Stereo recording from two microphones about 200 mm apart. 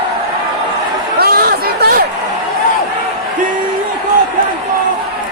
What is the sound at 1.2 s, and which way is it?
Chatter, 50° right (ahead or behind).